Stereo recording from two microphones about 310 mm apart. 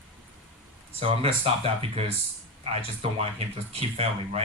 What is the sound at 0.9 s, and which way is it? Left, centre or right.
A man's voice, centre.